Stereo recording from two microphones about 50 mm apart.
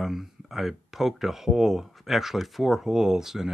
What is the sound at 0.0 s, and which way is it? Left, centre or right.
Speech, centre.